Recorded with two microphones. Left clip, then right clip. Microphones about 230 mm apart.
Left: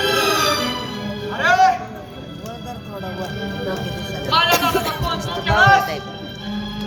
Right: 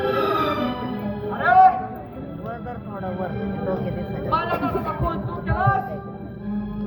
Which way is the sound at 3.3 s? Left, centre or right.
Left.